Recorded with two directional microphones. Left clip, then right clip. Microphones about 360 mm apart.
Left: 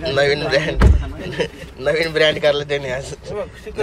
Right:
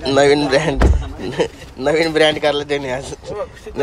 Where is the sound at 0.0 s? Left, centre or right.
Centre.